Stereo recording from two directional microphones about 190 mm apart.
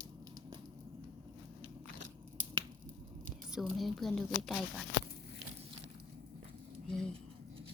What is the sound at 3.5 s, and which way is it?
A woman's voice, centre (ahead or behind).